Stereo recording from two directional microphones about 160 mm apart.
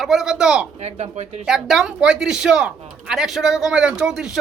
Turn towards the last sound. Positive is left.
turn(degrees=-5)  # may be behind; listen again after turning